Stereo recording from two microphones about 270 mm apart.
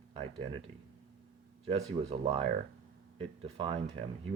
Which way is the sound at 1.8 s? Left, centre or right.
Right.